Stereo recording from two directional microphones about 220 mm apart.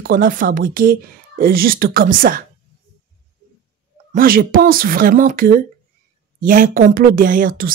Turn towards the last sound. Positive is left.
turn(degrees=-40)  # may be behind; listen again after turning